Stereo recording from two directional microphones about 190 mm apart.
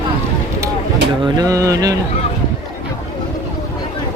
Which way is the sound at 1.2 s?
20° right (ahead or behind).